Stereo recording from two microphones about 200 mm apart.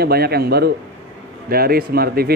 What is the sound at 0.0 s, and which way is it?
A man's voice, 50° right (ahead or behind).